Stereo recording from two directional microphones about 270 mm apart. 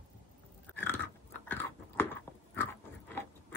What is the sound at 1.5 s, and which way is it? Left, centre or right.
Chewing, centre.